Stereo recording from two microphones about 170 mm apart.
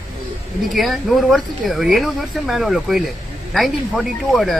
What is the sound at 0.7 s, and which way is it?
Speech, centre (ahead or behind).